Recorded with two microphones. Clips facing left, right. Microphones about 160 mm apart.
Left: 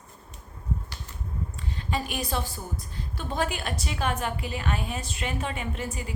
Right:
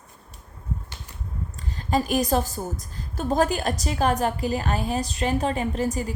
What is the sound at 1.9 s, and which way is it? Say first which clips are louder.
A woman's voice: right 9 dB; 40° right (ahead or behind).